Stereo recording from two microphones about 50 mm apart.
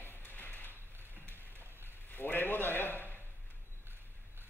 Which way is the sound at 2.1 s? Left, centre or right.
Left.